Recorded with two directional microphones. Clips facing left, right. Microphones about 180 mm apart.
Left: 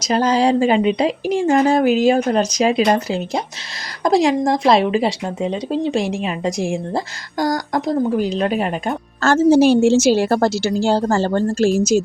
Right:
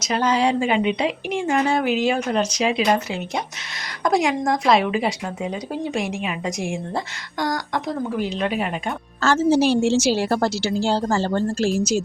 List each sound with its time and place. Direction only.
0.0 s speech: 35° left (ahead or behind)